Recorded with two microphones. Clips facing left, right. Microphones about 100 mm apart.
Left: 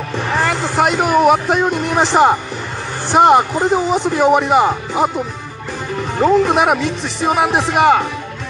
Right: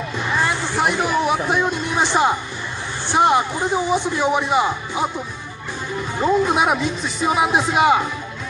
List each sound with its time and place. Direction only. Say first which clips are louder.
0.3 s speech: left 4 dB; 75° left (ahead or behind); by 5.1 s 50° left (ahead or behind)
5.9 s speech: left 5 dB; 70° left (ahead or behind)